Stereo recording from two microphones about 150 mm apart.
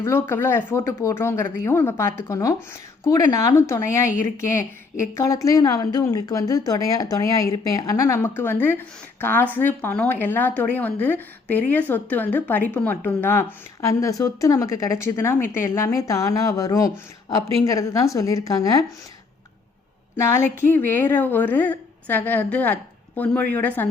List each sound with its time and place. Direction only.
0.0 s a woman's voice: 15° left (ahead or behind)
20.1 s a woman's voice: 15° left (ahead or behind)